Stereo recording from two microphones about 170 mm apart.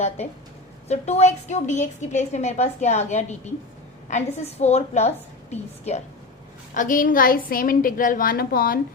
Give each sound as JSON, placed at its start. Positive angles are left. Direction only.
{"t": 0.9, "sound": "a woman's voice", "side_deg": 40}
{"t": 6.7, "sound": "a woman's voice", "side_deg": 50}